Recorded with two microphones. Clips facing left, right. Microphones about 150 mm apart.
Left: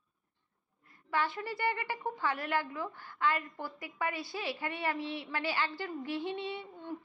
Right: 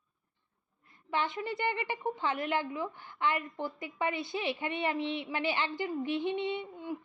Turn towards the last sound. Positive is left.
turn(degrees=-10)  # may be behind; listen again after turning